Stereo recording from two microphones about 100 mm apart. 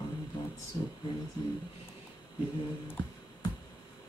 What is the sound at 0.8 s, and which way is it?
Speech, 35° left (ahead or behind).